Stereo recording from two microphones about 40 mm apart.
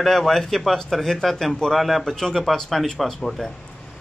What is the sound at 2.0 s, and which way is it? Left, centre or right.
A man's voice, centre.